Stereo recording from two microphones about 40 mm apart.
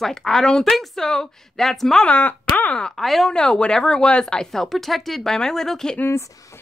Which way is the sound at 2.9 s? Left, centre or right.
Centre.